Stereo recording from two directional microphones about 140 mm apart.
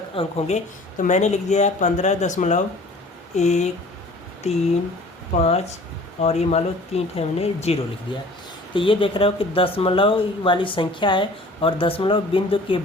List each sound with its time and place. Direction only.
0.1 s speech: 45° left (ahead or behind)